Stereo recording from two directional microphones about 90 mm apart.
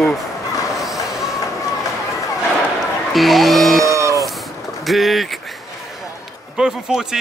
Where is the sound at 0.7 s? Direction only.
Centre (ahead or behind).